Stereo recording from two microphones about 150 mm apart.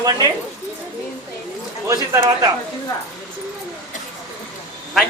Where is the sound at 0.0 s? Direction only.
25° right (ahead or behind).